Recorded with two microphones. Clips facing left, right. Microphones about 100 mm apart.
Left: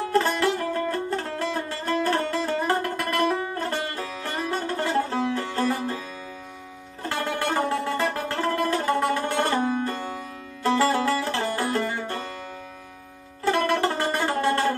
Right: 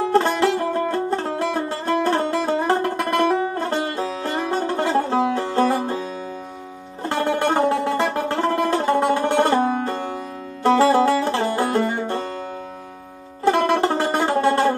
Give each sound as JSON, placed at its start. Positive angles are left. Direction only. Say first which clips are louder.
{"t": 0.1, "sound": "music", "louder": "right 3 dB", "side_deg": -25}
{"t": 13.4, "sound": "music", "louder": "right 5 dB", "side_deg": -25}